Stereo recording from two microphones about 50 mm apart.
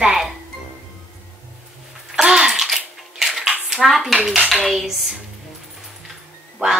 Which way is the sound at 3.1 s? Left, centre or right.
Centre.